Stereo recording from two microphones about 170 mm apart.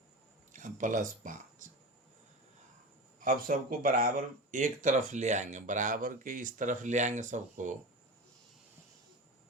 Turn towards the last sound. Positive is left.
turn(degrees=-45)  # may be behind; listen again after turning